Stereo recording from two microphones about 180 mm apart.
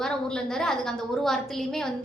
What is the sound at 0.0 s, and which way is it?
A woman's voice, 5° left (ahead or behind).